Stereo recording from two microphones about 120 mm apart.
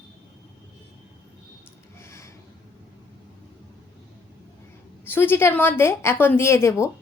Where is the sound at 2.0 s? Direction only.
25° left (ahead or behind).